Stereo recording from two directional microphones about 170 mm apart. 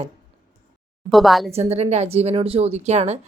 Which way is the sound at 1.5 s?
40° right (ahead or behind).